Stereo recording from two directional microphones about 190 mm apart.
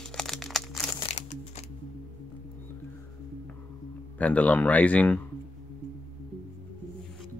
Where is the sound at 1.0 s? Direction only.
35° left (ahead or behind).